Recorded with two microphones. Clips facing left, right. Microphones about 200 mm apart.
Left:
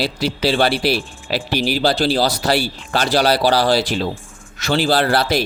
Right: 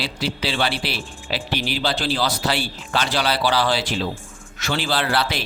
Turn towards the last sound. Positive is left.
turn(degrees=40)  # may be behind; listen again after turning